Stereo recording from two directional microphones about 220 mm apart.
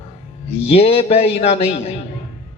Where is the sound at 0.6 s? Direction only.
25° left (ahead or behind).